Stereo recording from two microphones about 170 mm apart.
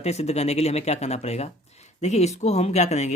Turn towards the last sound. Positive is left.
turn(degrees=40)  # may be behind; listen again after turning